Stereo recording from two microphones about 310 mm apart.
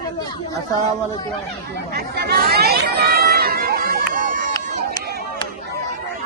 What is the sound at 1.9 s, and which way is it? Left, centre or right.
Chatter, right.